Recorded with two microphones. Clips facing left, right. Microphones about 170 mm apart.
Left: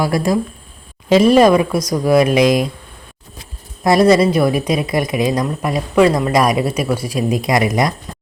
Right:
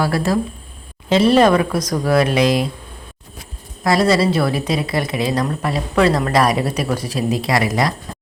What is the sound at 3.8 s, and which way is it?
Speech, 20° left (ahead or behind).